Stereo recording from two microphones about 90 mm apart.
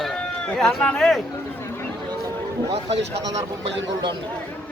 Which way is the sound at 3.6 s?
60° right (ahead or behind).